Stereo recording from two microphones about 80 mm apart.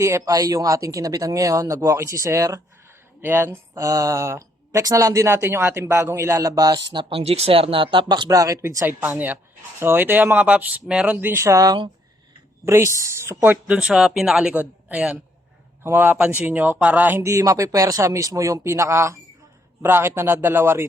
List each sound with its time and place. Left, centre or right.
0.0 s speech: right
3.2 s speech: right
3.8 s speech: right
6.6 s speech: right
7.7 s speech: right
8.9 s a man's voice: right
11.3 s speech: right
12.6 s a woman's voice: right; by 15.2 s centre
15.8 s a man's voice: right
17.2 s a man's voice: right